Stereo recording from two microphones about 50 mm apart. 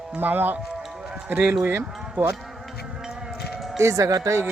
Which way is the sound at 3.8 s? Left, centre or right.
Right.